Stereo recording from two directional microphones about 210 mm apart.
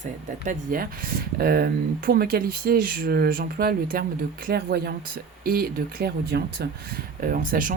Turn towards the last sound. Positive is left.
turn(degrees=-40)  # may be behind; listen again after turning